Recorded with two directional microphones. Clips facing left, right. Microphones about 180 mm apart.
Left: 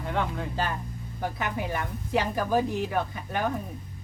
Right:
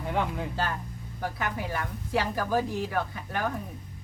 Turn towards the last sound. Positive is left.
turn(degrees=20)  # may be behind; listen again after turning